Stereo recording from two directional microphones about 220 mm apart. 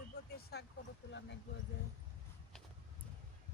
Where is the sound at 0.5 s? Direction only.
45° left (ahead or behind).